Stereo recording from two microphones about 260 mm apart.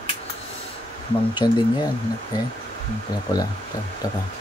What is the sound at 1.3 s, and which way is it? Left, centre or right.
Speech, centre.